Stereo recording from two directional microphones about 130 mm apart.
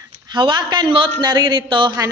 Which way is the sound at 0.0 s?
35° right (ahead or behind).